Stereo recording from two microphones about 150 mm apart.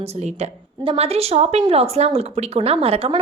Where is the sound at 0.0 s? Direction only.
45° right (ahead or behind).